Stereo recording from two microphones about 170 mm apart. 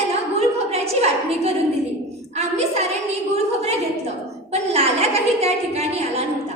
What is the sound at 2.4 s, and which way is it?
Speech, 40° right (ahead or behind).